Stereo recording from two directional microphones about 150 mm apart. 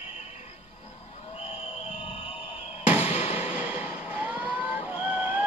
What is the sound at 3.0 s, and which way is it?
Music, 40° left (ahead or behind).